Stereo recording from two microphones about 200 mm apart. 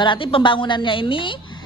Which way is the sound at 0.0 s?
25° left (ahead or behind).